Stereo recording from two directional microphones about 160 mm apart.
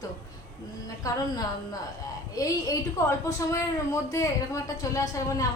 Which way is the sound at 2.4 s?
20° left (ahead or behind).